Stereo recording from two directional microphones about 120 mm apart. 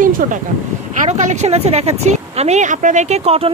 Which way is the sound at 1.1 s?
75° right (ahead or behind).